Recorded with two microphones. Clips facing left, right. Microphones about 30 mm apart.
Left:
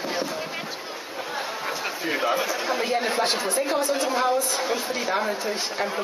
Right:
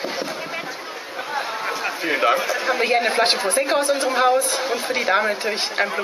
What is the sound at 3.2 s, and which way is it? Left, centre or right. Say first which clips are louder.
Speech: right 5 dB; right.